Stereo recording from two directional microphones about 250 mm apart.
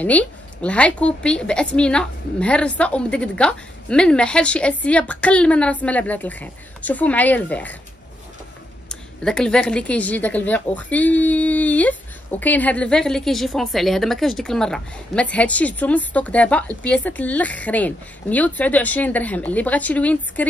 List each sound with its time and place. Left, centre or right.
0.0 s a woman's voice: centre
8.8 s a woman's voice: centre